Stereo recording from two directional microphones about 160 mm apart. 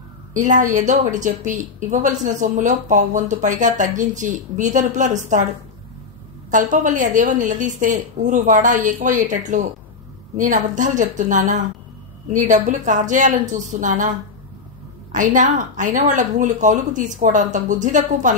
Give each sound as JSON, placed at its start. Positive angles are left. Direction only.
{"t": 0.3, "sound": "a woman's voice", "side_deg": -50}
{"t": 6.5, "sound": "a woman's voice", "side_deg": -50}
{"t": 15.1, "sound": "a woman's voice", "side_deg": -55}